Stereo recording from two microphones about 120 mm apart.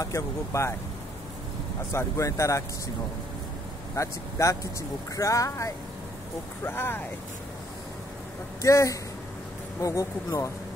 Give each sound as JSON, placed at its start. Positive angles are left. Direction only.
{"t": 0.0, "sound": "speech", "side_deg": 25}
{"t": 1.9, "sound": "speech", "side_deg": 25}
{"t": 3.9, "sound": "speech", "side_deg": 25}
{"t": 8.6, "sound": "speech", "side_deg": 25}